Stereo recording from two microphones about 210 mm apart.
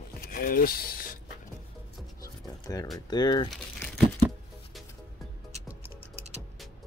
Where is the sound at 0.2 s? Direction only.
45° left (ahead or behind).